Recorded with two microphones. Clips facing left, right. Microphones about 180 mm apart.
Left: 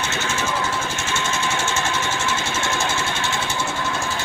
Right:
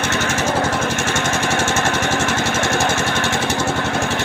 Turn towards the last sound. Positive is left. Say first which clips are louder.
# right 6 dB
turn(degrees=-70)  # may be behind; listen again after turning